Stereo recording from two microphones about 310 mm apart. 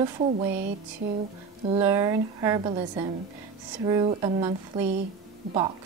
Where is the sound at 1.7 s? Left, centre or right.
Centre.